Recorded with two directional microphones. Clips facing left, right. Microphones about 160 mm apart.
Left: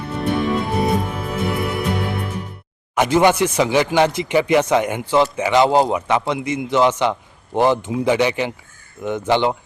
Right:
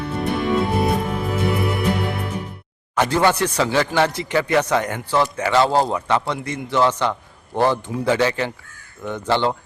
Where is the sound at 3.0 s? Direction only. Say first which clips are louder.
Left 3 dB; 15° left (ahead or behind).